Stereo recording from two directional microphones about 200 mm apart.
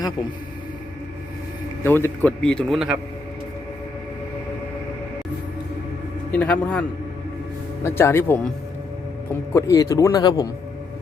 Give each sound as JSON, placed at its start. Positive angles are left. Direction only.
{"t": 1.8, "sound": "speech", "side_deg": 10}
{"t": 6.3, "sound": "speech", "side_deg": 5}
{"t": 7.9, "sound": "speech", "side_deg": 15}